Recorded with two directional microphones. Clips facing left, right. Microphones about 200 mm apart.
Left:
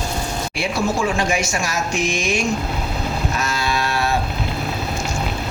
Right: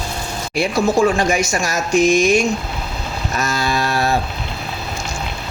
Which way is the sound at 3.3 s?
40° right (ahead or behind).